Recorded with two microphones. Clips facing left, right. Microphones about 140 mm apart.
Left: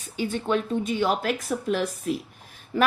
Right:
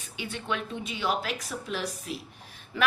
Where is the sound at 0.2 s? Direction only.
45° left (ahead or behind).